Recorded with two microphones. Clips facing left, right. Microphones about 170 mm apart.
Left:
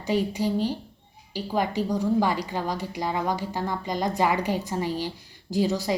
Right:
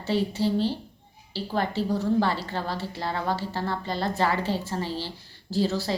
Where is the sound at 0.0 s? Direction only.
15° left (ahead or behind).